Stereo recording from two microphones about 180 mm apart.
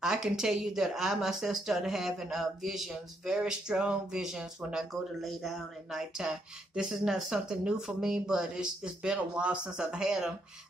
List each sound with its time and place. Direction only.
0.0 s speech: centre (ahead or behind)